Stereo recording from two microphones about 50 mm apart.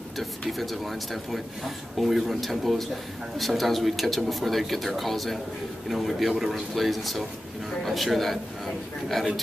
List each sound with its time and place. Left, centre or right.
0.5 s a man's voice: centre